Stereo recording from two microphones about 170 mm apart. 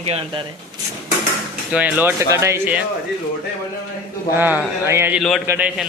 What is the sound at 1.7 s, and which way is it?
Speech, 10° right (ahead or behind).